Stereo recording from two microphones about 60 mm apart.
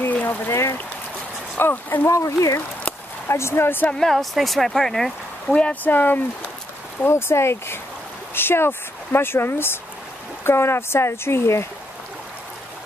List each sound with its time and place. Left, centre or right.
0.1 s a sound: left
0.5 s speech: left
1.6 s speech: left
2.0 s speech: left
3.3 s speech: left
3.9 s speech: centre
5.5 s speech: centre
5.9 s speech: left
7.1 s speech: left